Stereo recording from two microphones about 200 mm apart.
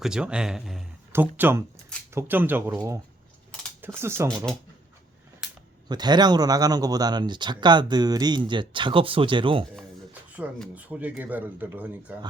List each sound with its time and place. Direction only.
0.0 s speech: 5° right (ahead or behind)
5.9 s speech: 20° right (ahead or behind)
10.3 s speech: 5° right (ahead or behind)